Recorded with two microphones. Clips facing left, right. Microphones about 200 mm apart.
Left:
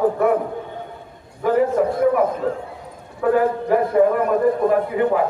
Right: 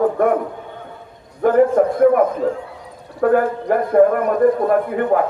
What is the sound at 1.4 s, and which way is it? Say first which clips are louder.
Speech: right 4 dB; 55° right (ahead or behind).